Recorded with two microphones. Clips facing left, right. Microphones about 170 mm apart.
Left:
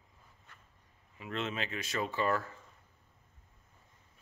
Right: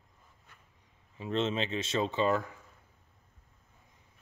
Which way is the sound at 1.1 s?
30° right (ahead or behind).